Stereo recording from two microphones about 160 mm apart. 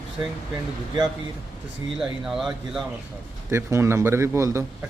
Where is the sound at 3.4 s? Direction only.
15° right (ahead or behind).